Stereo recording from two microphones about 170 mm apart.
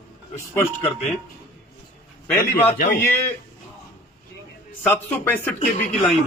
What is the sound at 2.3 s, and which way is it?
Speech, 10° left (ahead or behind).